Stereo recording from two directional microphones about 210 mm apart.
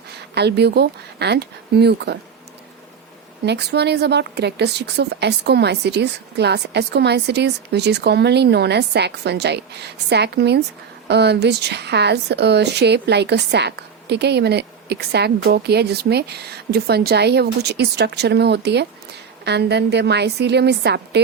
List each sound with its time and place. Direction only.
0.3 s speech: 50° right (ahead or behind)
3.4 s speech: 55° right (ahead or behind)